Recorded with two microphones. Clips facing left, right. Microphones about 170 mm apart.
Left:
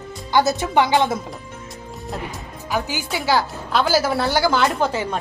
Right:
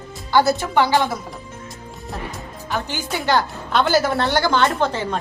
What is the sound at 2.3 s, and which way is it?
Speech, 5° left (ahead or behind).